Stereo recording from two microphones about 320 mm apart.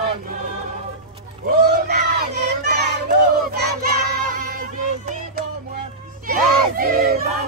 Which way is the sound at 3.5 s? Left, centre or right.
Right.